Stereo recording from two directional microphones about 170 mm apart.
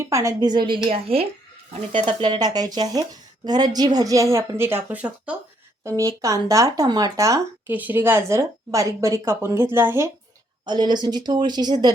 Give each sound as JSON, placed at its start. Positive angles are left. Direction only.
{"t": 0.0, "sound": "speech", "side_deg": -20}
{"t": 5.8, "sound": "speech", "side_deg": -20}
{"t": 10.7, "sound": "speech", "side_deg": -25}